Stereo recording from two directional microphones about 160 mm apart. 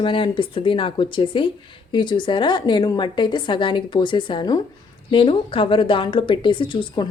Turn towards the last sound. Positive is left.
turn(degrees=30)  # may be behind; listen again after turning